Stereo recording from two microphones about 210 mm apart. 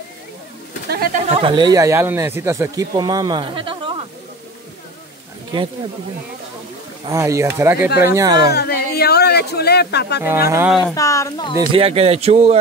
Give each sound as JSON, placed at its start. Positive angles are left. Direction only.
{"t": 0.8, "sound": "a sound", "side_deg": -45}
{"t": 1.3, "sound": "speech", "side_deg": -25}
{"t": 7.1, "sound": "speech", "side_deg": -15}
{"t": 8.5, "sound": "speech", "side_deg": 50}
{"t": 10.2, "sound": "speech", "side_deg": -10}
{"t": 11.0, "sound": "speech", "side_deg": 15}
{"t": 11.5, "sound": "speech", "side_deg": -25}